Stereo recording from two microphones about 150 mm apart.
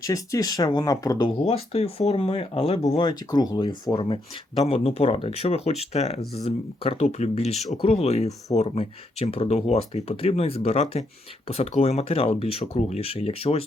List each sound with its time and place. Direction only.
0.0 s speech: 20° left (ahead or behind)
1.5 s speech: 40° left (ahead or behind)